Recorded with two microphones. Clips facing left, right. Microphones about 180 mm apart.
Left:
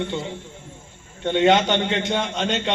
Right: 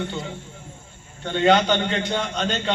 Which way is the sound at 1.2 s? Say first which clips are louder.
Left 1 dB; 20° left (ahead or behind).